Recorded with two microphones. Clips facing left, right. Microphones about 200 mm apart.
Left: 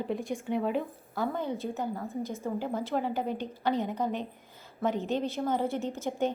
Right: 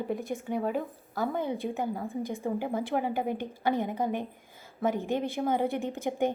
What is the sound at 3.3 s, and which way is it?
Speech, 50° right (ahead or behind).